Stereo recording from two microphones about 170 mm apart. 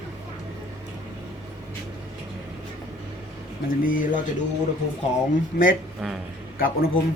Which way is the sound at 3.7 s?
55° left (ahead or behind).